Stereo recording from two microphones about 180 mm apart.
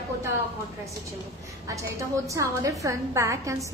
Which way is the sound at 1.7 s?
15° right (ahead or behind).